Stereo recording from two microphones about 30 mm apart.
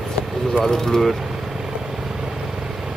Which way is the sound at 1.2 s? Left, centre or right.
Centre.